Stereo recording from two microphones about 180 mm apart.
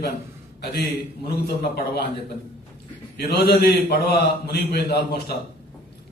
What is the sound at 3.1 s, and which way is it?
A man's voice, 60° left (ahead or behind).